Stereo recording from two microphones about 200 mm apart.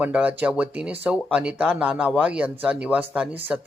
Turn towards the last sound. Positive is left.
turn(degrees=-5)  # may be behind; listen again after turning